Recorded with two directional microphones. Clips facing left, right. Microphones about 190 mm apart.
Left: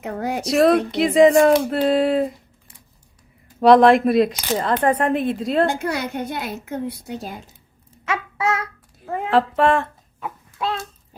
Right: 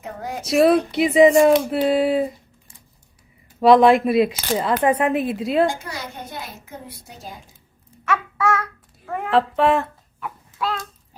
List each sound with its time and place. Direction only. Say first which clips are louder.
0.0 s speech: left 6 dB; 70° left (ahead or behind)
0.4 s speech: right 1 dB; centre (ahead or behind)
3.6 s speech: left 1 dB; centre (ahead or behind)
5.6 s a woman's voice: left 3 dB; 60° left (ahead or behind)
8.4 s babbling: even; 20° left (ahead or behind)
9.0 s a sound: left 1 dB; 25° left (ahead or behind)
9.3 s speech: even; centre (ahead or behind)